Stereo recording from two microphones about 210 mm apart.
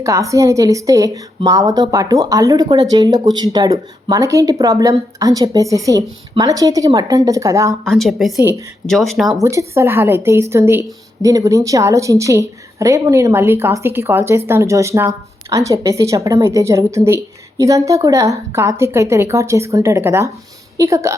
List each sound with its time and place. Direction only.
0.0 s speech: 15° right (ahead or behind)
7.9 s speech: centre (ahead or behind)
9.4 s speech: 15° right (ahead or behind)